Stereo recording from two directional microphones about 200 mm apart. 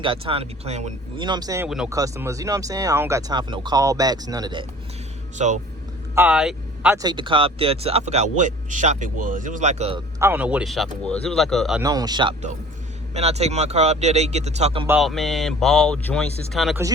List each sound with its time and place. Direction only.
0.0 s speech: 25° right (ahead or behind)
1.2 s speech: 20° right (ahead or behind)
5.4 s speech: 35° right (ahead or behind)
6.1 s speech: 5° right (ahead or behind)
6.9 s speech: 20° right (ahead or behind)
10.2 s speech: 10° right (ahead or behind)
11.8 s speech: 20° right (ahead or behind)
13.1 s speech: 35° right (ahead or behind)
14.8 s speech: centre (ahead or behind)